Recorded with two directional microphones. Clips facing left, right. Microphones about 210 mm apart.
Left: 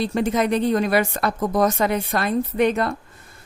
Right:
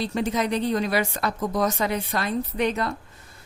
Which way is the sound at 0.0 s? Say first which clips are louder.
Left 4 dB; 50° left (ahead or behind).